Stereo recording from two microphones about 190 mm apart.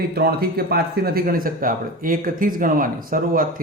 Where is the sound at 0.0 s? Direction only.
55° right (ahead or behind).